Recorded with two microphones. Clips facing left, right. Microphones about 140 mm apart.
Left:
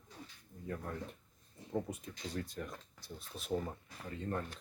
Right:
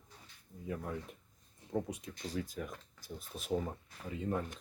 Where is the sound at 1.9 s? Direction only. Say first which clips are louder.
Right 1 dB; 90° right.